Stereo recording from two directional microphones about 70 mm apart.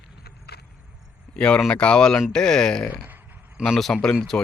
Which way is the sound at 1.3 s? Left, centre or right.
Centre.